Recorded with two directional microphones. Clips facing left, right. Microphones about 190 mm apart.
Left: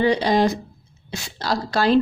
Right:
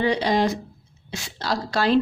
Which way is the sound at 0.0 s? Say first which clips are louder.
Left 3 dB; 40° left (ahead or behind).